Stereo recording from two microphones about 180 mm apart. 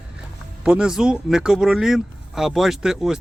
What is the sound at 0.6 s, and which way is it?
Speech, 5° right (ahead or behind).